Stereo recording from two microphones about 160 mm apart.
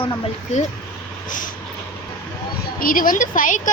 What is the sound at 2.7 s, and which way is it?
Speech, 60° left (ahead or behind).